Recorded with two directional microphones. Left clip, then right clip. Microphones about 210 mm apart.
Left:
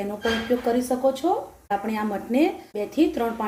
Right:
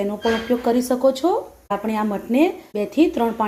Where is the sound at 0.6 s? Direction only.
30° right (ahead or behind).